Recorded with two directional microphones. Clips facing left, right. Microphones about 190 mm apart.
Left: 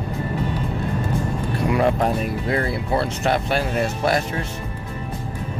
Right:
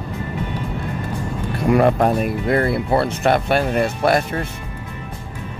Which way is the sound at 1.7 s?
55° right (ahead or behind).